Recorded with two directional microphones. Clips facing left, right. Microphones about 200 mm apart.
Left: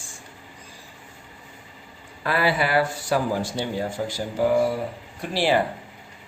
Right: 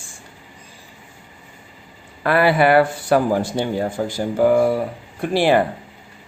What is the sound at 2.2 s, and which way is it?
Speech, 60° right (ahead or behind).